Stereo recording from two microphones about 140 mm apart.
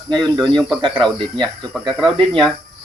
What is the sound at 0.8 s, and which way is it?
Speech, 35° right (ahead or behind).